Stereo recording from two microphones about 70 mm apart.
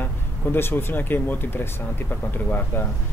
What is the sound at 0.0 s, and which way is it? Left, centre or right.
Speech, left.